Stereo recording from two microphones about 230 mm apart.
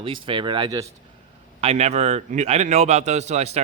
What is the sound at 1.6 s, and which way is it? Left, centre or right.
A man's voice, right.